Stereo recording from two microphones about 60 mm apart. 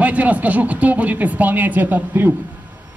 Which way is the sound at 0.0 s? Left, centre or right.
Right.